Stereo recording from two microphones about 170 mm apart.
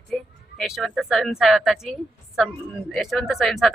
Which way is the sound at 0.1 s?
5° left (ahead or behind).